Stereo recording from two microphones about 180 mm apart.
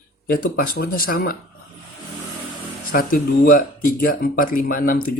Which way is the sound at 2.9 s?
50° left (ahead or behind).